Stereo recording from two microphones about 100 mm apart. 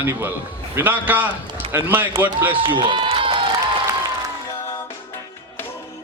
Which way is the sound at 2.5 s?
55° right (ahead or behind).